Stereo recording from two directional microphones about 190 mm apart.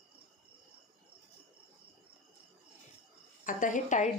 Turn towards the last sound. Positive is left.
turn(degrees=40)  # may be behind; listen again after turning